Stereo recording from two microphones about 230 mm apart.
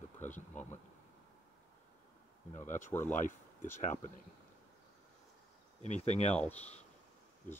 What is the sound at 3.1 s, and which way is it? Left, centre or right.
Speech, left.